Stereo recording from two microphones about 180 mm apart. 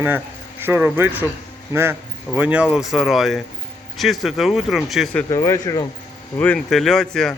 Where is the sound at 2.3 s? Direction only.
10° right (ahead or behind).